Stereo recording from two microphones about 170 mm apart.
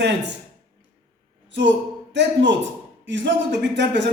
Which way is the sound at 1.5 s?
90° right.